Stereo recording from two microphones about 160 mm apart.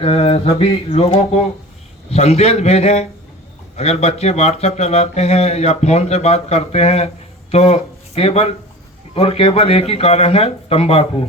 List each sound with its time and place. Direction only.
0.0 s speech: 40° left (ahead or behind)